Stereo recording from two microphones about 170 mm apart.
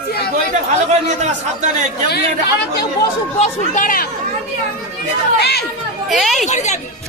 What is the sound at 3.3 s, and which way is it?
Speech, 50° left (ahead or behind).